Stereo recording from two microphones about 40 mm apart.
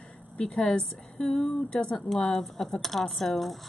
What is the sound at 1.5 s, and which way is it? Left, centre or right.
Speech, left.